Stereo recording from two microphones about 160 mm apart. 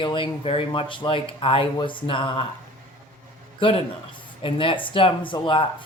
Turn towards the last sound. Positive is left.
turn(degrees=30)  # may be behind; listen again after turning